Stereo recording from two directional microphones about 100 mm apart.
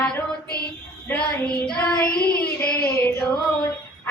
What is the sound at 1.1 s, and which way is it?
Child singing, 10° left (ahead or behind).